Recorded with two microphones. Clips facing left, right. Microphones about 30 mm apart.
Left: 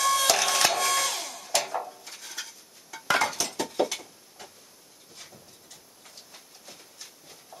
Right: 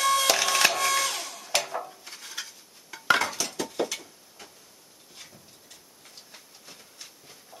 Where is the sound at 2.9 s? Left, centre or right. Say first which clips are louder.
Left 1 dB; right.